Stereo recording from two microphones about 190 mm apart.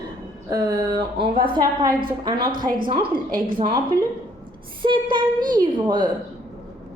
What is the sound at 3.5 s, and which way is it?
A woman's voice, 25° right (ahead or behind).